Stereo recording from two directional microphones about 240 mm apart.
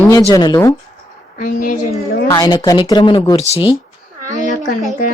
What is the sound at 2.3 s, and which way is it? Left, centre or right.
Speech, centre.